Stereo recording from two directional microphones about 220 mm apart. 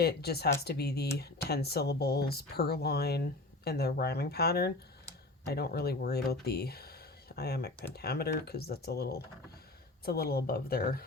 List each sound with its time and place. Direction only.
0.0 s speech: 45° left (ahead or behind)